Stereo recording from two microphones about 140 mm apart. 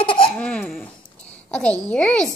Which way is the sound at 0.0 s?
40° left (ahead or behind).